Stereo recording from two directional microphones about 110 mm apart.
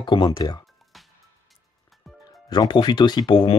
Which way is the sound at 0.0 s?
45° left (ahead or behind).